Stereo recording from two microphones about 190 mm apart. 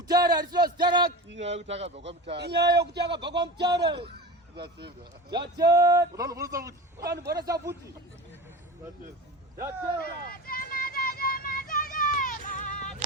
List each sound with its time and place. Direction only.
0.1 s speech: 20° right (ahead or behind)
1.4 s speech: 35° right (ahead or behind)
2.6 s speech: 60° right (ahead or behind)
5.3 s a man's voice: 20° right (ahead or behind)
7.1 s speech: 60° right (ahead or behind)
7.3 s speech: 20° right (ahead or behind)
10.0 s vehicle: 50° left (ahead or behind)